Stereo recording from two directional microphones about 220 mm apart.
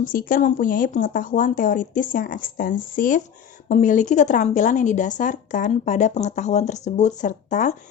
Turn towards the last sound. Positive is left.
turn(degrees=35)  # may be behind; listen again after turning